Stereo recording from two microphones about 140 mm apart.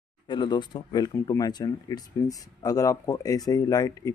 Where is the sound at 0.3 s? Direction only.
35° left (ahead or behind).